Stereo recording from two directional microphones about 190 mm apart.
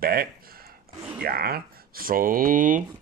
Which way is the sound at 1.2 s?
55° right (ahead or behind).